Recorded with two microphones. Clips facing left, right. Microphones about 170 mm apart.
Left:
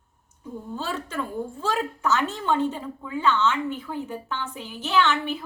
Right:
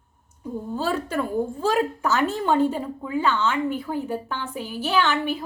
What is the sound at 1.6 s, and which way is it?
A woman's voice, 10° right (ahead or behind).